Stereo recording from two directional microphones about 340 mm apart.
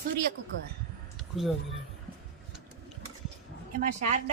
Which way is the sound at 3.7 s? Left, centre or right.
Right.